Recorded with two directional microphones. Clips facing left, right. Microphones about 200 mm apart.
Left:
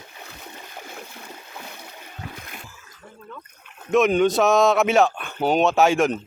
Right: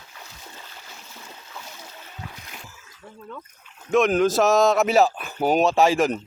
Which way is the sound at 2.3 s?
55° left (ahead or behind).